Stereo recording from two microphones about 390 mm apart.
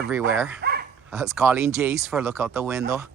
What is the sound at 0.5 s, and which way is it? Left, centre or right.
Dog, right.